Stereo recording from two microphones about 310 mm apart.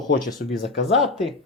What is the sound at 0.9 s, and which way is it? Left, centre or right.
Speech, centre.